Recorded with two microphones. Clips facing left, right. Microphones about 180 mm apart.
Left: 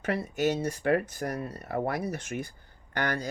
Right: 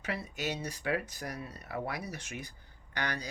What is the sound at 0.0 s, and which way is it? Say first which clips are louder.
Speech: left 9 dB; 50° left (ahead or behind).